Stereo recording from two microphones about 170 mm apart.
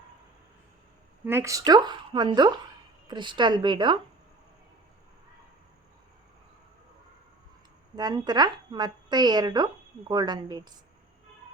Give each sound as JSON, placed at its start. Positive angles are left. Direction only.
{"t": 1.2, "sound": "speech", "side_deg": -15}
{"t": 7.9, "sound": "speech", "side_deg": -25}